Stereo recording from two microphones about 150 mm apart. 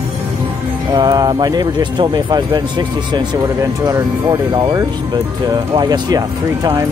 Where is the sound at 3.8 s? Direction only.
25° right (ahead or behind).